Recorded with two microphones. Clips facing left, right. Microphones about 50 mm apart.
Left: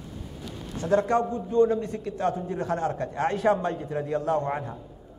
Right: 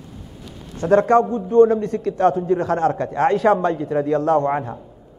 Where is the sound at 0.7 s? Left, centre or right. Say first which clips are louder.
Right 8 dB; right.